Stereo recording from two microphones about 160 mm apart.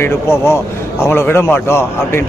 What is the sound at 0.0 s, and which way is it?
A man's voice, 15° left (ahead or behind).